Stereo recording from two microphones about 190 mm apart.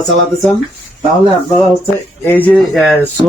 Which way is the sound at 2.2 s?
10° left (ahead or behind).